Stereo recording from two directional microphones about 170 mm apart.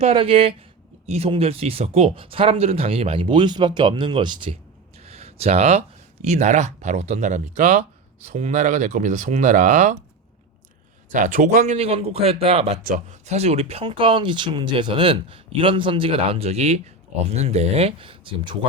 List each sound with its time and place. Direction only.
0.0 s speech: 35° right (ahead or behind)
5.0 s a sound: 35° right (ahead or behind)
6.2 s speech: 45° right (ahead or behind)
11.1 s speech: 50° right (ahead or behind)
12.8 s speech: 45° right (ahead or behind); by 18.5 s 30° right (ahead or behind)